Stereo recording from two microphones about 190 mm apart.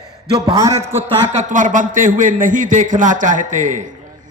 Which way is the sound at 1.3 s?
40° right (ahead or behind).